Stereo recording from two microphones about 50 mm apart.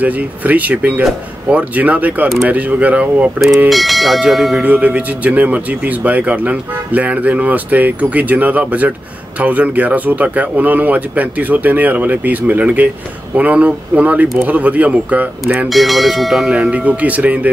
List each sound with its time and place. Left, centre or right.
0.0 s speech: right
3.5 s speech: centre
4.6 s speech: right
15.7 s speech: centre
16.7 s speech: right